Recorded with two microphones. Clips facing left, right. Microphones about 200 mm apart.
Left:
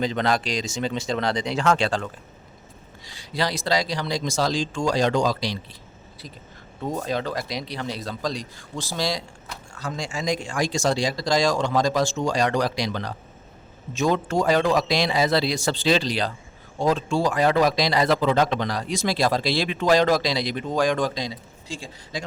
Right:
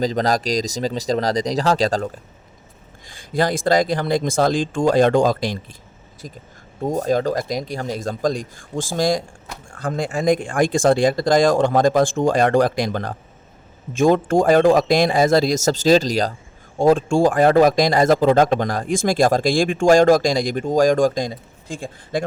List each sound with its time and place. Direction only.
0.0 s speech: 40° right (ahead or behind)
3.1 s speech: 50° right (ahead or behind)